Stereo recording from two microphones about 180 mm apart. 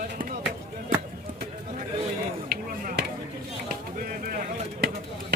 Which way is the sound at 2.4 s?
55° right (ahead or behind).